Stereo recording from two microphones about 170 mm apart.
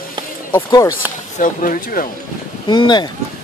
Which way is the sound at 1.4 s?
50° left (ahead or behind).